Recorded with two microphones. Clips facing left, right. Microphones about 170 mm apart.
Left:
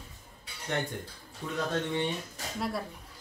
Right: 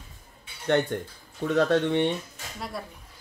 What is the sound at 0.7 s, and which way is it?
Speech, 70° right (ahead or behind).